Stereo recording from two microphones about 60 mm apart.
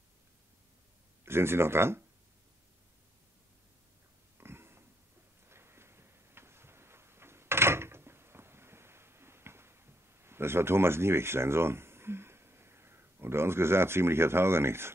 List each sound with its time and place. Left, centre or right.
1.2 s speech: right
4.4 s pig: right
5.5 s a sound: right